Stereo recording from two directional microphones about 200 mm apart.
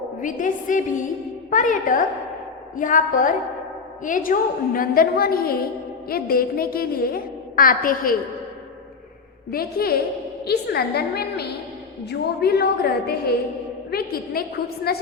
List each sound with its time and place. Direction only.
0.2 s a woman's voice: 40° left (ahead or behind)
9.5 s a woman's voice: 50° left (ahead or behind)